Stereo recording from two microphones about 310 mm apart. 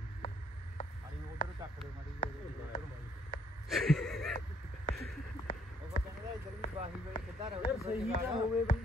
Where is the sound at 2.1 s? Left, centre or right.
Left.